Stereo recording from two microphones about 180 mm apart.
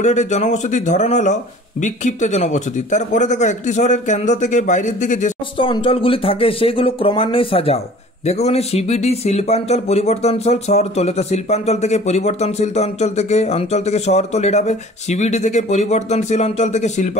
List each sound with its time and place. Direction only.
0.0 s speech: 40° left (ahead or behind)
5.6 s speech: 30° left (ahead or behind)